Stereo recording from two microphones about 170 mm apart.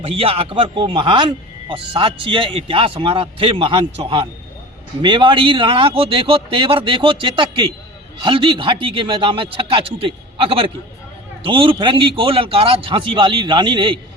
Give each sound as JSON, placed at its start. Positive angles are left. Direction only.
{"t": 0.0, "sound": "a man's voice", "side_deg": -35}